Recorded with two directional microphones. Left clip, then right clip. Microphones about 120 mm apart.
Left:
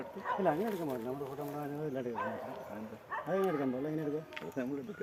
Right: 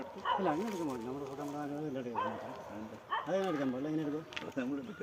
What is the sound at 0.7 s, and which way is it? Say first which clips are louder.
Speech: left 1 dB; 40° right (ahead or behind).